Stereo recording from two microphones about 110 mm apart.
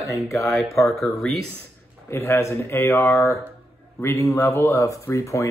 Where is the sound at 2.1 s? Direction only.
25° left (ahead or behind).